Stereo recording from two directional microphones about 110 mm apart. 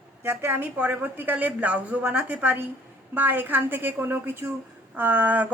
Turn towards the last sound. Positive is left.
turn(degrees=-15)  # may be behind; listen again after turning